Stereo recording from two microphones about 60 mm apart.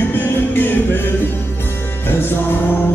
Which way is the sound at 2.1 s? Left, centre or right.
Left.